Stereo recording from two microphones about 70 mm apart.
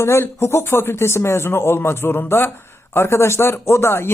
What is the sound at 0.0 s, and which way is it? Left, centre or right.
Speech, left.